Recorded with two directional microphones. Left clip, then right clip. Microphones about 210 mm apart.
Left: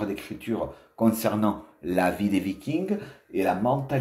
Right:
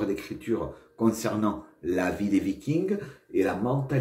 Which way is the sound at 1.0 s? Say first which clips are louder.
Left 2 dB; 40° left (ahead or behind).